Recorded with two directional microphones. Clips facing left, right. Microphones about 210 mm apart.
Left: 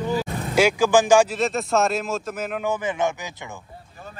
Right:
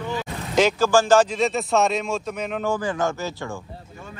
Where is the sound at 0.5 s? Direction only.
10° left (ahead or behind).